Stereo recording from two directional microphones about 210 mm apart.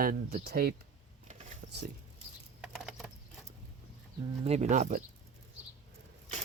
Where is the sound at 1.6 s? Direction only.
50° right (ahead or behind).